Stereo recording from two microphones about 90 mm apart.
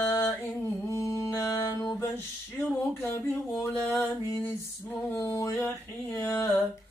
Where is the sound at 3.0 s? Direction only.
25° left (ahead or behind).